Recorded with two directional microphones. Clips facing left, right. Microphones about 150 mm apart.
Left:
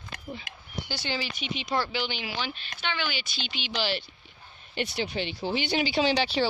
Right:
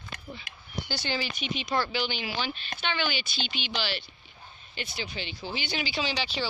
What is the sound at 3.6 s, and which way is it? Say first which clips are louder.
Speech: even; 90° left.